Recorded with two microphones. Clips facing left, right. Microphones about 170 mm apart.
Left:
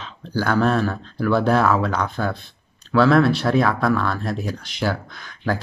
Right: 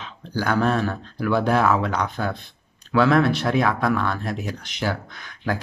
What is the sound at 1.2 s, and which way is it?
Speech, 15° right (ahead or behind).